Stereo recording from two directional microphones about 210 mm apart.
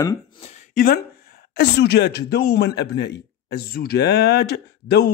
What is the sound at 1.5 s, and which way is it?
A man's voice, 50° left (ahead or behind).